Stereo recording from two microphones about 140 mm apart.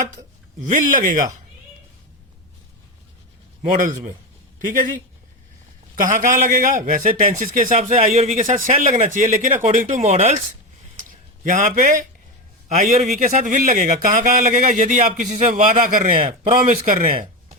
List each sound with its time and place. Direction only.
0.7 s a man's voice: 70° right (ahead or behind)
3.6 s speech: 55° right (ahead or behind)
6.1 s a man's voice: 65° right (ahead or behind)
9.6 s speech: 50° right (ahead or behind)
11.4 s a man's voice: 65° right (ahead or behind)
16.1 s speech: 40° right (ahead or behind)
16.6 s a man's voice: 70° right (ahead or behind)